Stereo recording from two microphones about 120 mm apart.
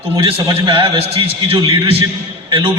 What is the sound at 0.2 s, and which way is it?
A man's voice, 50° right (ahead or behind).